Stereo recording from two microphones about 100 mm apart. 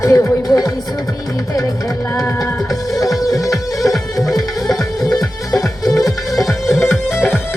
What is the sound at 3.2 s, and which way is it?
Music, 35° left (ahead or behind).